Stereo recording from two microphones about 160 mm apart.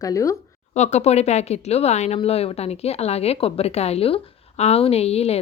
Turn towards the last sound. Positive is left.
turn(degrees=40)  # may be behind; listen again after turning